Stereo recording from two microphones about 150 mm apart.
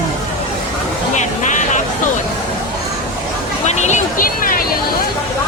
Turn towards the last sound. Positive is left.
turn(degrees=65)  # may be behind; listen again after turning